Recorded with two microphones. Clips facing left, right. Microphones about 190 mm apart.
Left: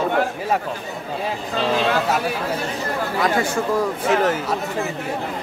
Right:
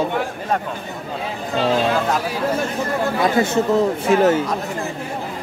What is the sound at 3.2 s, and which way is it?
Speech, 25° right (ahead or behind).